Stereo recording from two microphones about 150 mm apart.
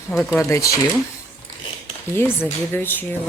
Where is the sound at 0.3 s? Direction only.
20° left (ahead or behind).